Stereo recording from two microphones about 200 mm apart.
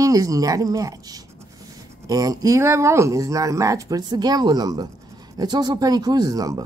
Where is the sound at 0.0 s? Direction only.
15° right (ahead or behind).